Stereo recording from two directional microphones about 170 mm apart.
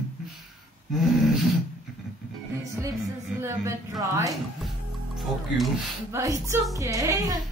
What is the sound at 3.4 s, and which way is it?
Speech, 20° right (ahead or behind).